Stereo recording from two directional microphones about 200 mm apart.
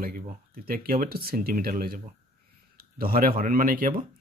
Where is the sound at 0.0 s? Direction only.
50° right (ahead or behind).